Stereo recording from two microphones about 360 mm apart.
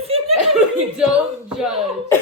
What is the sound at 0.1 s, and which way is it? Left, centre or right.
Laughter, centre.